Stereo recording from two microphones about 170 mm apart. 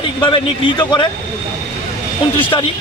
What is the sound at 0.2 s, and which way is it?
Speech, 30° left (ahead or behind).